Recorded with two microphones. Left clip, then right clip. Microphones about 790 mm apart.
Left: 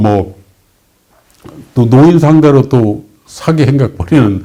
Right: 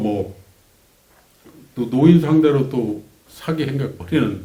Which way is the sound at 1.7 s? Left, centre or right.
Left.